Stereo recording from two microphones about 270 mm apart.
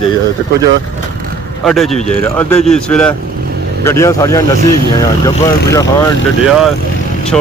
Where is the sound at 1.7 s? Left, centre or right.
Centre.